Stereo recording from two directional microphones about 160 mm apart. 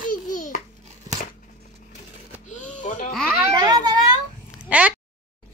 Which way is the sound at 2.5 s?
50° left (ahead or behind).